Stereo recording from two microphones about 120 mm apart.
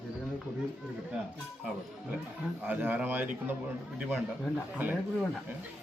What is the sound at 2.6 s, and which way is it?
A man's voice, 15° right (ahead or behind).